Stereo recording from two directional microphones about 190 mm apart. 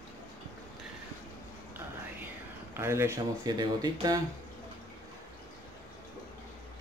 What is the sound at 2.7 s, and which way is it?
Speech, 15° right (ahead or behind).